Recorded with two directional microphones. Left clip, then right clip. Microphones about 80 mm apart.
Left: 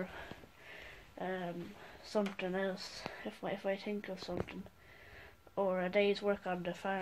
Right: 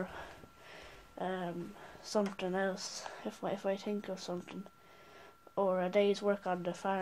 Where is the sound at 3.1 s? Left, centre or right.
Right.